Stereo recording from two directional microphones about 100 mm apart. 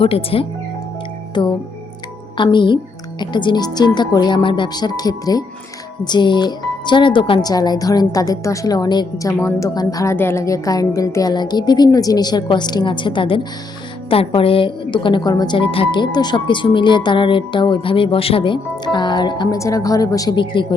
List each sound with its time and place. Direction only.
0.0 s speech: 70° left (ahead or behind)
1.3 s speech: 50° left (ahead or behind)
7.4 s a woman's voice: 40° left (ahead or behind)
9.2 s a woman's voice: 30° left (ahead or behind); by 15.2 s 55° left (ahead or behind)
15.2 s a woman's voice: 40° left (ahead or behind)
15.5 s speech: 65° left (ahead or behind); by 19.5 s 45° left (ahead or behind)
19.5 s a woman's voice: 35° left (ahead or behind)
20.3 s a woman's voice: 55° left (ahead or behind)